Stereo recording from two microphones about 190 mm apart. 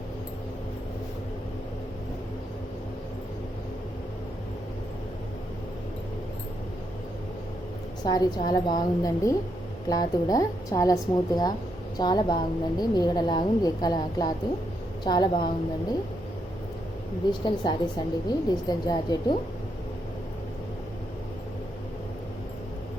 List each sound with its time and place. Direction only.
8.0 s a woman's voice: 20° left (ahead or behind)
17.4 s a woman's voice: 25° left (ahead or behind)